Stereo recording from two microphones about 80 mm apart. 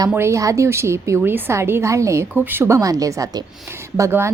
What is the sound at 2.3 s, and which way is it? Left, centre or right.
Speech, right.